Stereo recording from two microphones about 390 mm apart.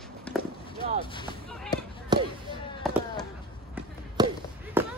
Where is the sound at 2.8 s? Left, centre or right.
Centre.